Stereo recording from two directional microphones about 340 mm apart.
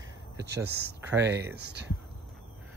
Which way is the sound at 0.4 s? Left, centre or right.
Right.